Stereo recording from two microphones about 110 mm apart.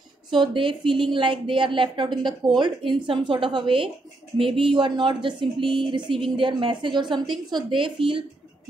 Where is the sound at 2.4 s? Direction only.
5° right (ahead or behind).